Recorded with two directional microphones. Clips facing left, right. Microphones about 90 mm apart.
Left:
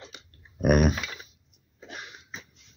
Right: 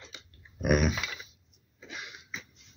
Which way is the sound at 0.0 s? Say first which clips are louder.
Left 3 dB; 50° left (ahead or behind).